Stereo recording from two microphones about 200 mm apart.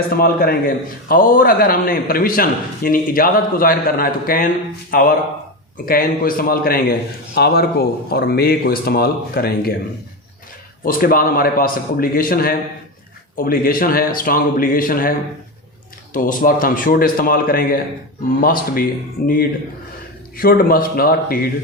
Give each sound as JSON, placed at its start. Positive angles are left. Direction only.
{"t": 0.2, "sound": "a man's voice", "side_deg": 50}
{"t": 10.8, "sound": "a man's voice", "side_deg": 45}
{"t": 16.1, "sound": "a man's voice", "side_deg": 45}